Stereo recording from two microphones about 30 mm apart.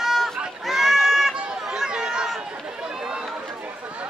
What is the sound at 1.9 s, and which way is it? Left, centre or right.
Run, right.